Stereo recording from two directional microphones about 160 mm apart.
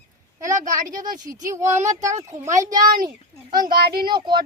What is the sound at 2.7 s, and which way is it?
Speech, 60° right (ahead or behind).